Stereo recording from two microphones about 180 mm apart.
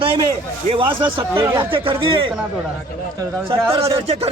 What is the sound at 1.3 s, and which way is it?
Speech, 10° right (ahead or behind).